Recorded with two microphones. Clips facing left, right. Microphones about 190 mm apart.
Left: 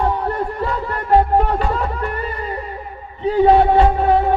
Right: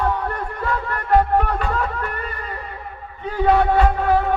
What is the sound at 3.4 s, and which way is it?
Speech, 25° left (ahead or behind).